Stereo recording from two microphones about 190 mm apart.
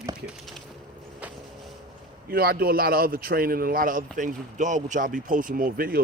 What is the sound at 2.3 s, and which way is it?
Speech, 55° right (ahead or behind).